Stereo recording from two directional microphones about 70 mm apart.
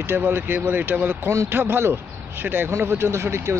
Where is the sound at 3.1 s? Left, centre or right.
Right.